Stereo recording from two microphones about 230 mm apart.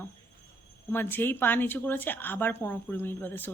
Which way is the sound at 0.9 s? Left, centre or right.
Centre.